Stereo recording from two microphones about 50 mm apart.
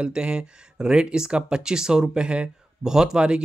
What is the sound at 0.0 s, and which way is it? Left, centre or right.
Speech, centre.